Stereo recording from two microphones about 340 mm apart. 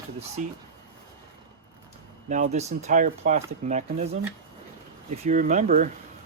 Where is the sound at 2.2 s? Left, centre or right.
Right.